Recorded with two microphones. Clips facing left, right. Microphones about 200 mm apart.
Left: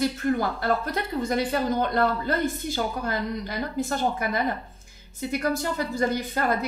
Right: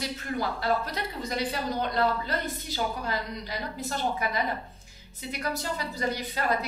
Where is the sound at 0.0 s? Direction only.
50° left (ahead or behind).